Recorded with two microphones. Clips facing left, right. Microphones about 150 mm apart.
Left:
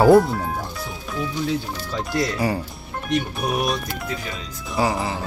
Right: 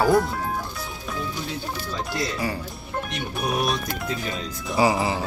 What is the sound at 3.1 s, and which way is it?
Speech, centre (ahead or behind).